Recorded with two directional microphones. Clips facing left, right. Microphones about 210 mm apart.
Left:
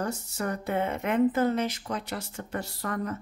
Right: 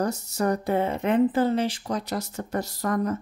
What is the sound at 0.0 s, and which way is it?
Speech, 40° right (ahead or behind).